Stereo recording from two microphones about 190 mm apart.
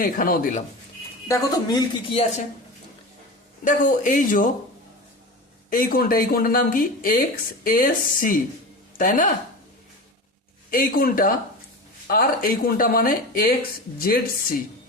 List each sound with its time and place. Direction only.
0.0 s speech: 45° left (ahead or behind)
1.3 s speech: 20° left (ahead or behind)
3.6 s speech: 45° left (ahead or behind)
5.7 s speech: 50° left (ahead or behind)
10.7 s speech: 50° left (ahead or behind)